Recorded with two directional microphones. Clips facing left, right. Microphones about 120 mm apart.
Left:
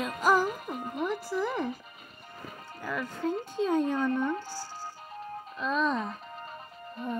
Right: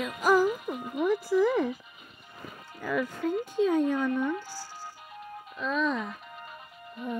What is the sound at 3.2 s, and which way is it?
Speech, 30° left (ahead or behind).